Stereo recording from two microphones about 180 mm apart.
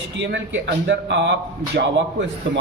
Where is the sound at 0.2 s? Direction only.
75° right (ahead or behind).